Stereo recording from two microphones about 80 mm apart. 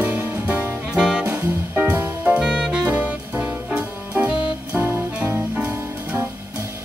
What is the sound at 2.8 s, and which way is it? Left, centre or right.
Music, centre.